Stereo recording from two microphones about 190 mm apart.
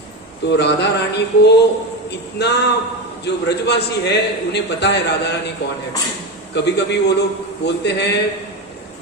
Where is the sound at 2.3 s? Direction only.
60° left (ahead or behind).